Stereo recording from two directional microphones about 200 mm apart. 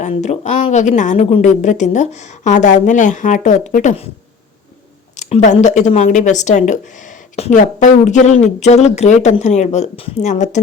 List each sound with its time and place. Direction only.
0.0 s a woman's voice: 35° left (ahead or behind)
5.1 s a woman's voice: 35° left (ahead or behind)